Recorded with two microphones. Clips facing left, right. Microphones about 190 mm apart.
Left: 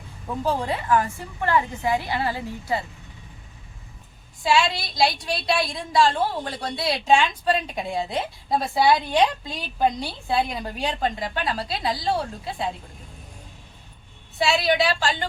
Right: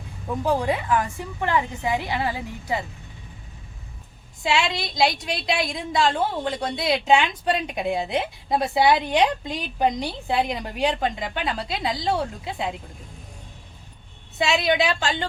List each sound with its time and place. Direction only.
0.4 s a woman's voice: 15° right (ahead or behind)
4.4 s a woman's voice: 20° right (ahead or behind)
14.3 s a woman's voice: 20° right (ahead or behind)